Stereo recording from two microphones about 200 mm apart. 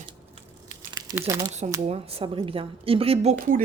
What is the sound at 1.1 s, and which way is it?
Speech, 15° right (ahead or behind).